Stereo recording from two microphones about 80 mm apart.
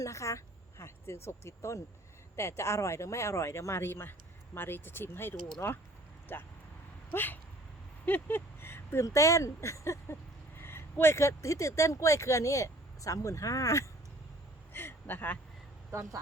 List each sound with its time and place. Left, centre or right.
0.0 s speech: left
9.0 s speech: left
14.7 s speech: left